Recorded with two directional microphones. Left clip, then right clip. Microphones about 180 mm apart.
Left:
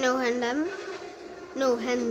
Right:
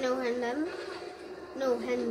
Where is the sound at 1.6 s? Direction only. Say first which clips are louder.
Left 5 dB; 40° left (ahead or behind).